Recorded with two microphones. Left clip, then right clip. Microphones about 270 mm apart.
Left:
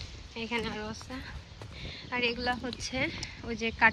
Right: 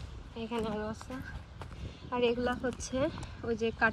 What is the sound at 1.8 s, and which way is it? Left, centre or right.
Speech, centre.